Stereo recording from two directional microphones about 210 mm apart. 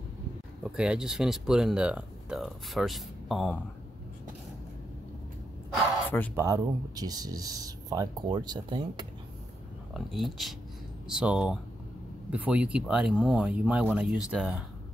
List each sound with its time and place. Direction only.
0.7 s speech: 5° right (ahead or behind)
6.0 s speech: 10° left (ahead or behind)
6.3 s speech: 15° right (ahead or behind)
9.9 s speech: centre (ahead or behind)